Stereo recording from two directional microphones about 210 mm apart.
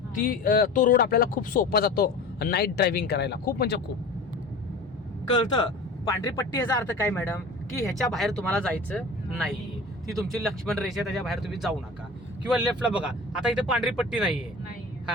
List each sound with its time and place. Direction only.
0.1 s speech: 40° left (ahead or behind)
5.4 s speech: 20° left (ahead or behind)
7.1 s speech: 5° left (ahead or behind)